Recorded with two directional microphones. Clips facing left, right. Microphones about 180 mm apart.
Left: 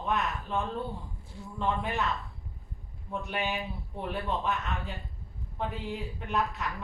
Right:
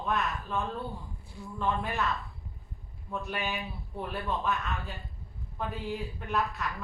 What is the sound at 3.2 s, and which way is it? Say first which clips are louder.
A man's voice: left 3 dB; 20° left (ahead or behind).